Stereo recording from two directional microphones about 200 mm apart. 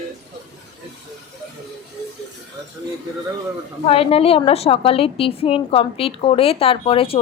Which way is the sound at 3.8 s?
30° left (ahead or behind).